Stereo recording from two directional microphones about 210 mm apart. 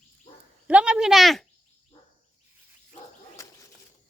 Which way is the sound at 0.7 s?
5° right (ahead or behind).